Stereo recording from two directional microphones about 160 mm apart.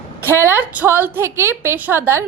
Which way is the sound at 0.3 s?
15° right (ahead or behind).